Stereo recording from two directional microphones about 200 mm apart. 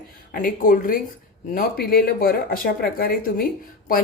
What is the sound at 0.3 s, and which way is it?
A woman's voice, 45° left (ahead or behind).